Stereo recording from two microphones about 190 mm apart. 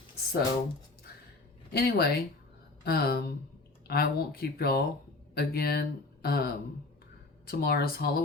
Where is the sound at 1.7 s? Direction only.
55° left (ahead or behind).